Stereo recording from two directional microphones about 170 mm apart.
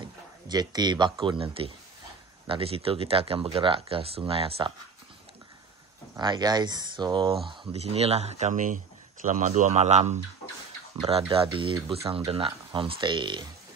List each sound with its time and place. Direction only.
0.0 s speech: 25° right (ahead or behind)
6.1 s speech: 25° right (ahead or behind)
7.6 s speech: 35° right (ahead or behind)